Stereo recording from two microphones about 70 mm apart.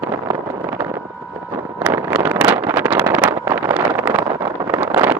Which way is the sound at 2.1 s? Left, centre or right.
Right.